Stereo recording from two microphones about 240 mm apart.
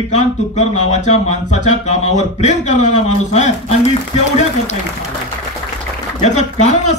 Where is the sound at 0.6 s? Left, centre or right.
Left.